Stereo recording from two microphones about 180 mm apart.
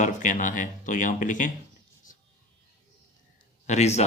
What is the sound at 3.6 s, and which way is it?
Speech, 40° left (ahead or behind).